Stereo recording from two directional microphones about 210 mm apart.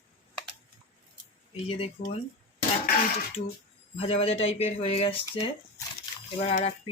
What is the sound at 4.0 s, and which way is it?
Speech, 30° left (ahead or behind).